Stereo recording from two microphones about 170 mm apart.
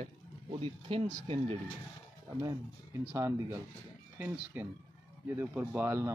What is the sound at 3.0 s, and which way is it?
Speech, 15° right (ahead or behind).